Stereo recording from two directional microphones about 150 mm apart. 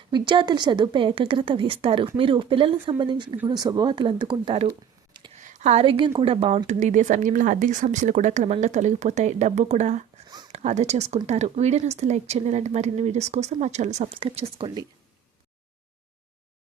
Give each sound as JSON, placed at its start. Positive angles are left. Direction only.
{"t": 0.1, "sound": "a woman's voice", "side_deg": -30}
{"t": 5.4, "sound": "a sound", "side_deg": -55}
{"t": 5.8, "sound": "speech", "side_deg": -35}
{"t": 10.2, "sound": "a sound", "side_deg": -30}
{"t": 10.5, "sound": "speech", "side_deg": -50}
{"t": 14.2, "sound": "a woman's voice", "side_deg": -40}